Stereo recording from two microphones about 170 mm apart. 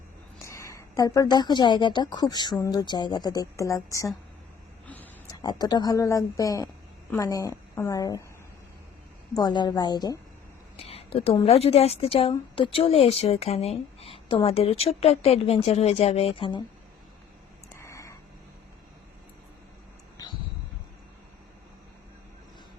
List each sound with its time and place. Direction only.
0.3 s a woman's voice: 15° left (ahead or behind)
5.4 s a woman's voice: 25° left (ahead or behind)
9.3 s a woman's voice: 25° left (ahead or behind)
10.8 s a sound: 35° left (ahead or behind)
11.4 s a woman's voice: 35° left (ahead or behind)
17.7 s a sound: 15° left (ahead or behind)